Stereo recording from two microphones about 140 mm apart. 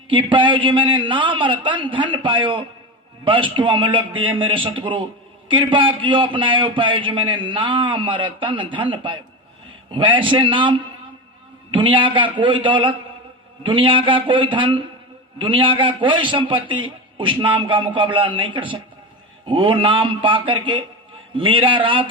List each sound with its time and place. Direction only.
0.1 s a man's voice: 35° right (ahead or behind)